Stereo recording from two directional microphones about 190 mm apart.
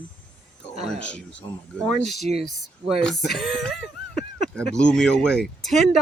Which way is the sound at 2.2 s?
35° right (ahead or behind).